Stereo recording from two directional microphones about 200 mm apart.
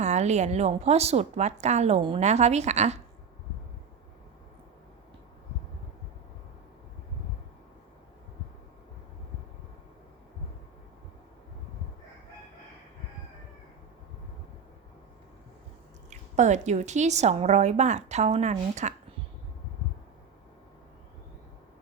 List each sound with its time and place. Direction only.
0.0 s a woman's voice: 35° right (ahead or behind)
16.0 s a woman's voice: 35° right (ahead or behind)